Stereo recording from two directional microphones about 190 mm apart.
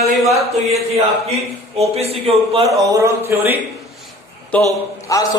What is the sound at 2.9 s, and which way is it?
Speech, 15° right (ahead or behind).